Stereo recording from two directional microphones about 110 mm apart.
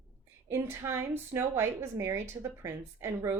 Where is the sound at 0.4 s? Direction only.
20° right (ahead or behind).